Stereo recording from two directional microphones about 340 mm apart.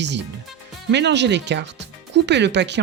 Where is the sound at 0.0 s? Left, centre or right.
Right.